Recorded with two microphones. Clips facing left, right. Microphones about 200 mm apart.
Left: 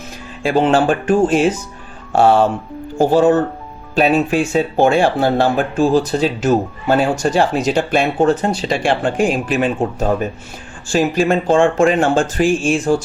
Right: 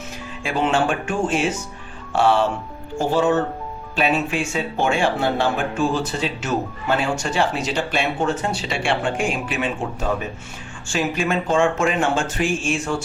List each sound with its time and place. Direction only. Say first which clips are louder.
0.4 s speech: left 7 dB; 35° left (ahead or behind)